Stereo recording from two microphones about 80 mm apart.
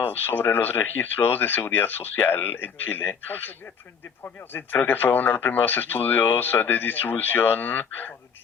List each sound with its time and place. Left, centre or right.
0.0 s speech: left